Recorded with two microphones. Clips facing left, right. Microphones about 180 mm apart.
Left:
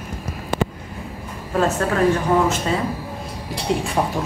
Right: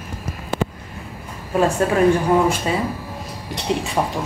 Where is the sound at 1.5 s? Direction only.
15° right (ahead or behind).